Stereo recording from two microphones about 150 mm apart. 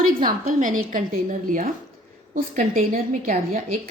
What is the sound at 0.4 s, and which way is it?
A woman's voice, 60° right (ahead or behind).